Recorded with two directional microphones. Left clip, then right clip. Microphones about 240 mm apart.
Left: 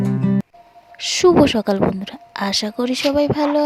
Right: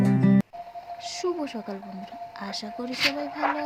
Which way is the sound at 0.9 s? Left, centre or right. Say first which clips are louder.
Left 17 dB; left.